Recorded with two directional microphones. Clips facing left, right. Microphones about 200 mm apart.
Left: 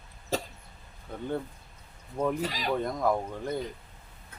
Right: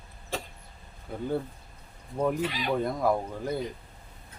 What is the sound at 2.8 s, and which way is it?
Speech, 10° right (ahead or behind).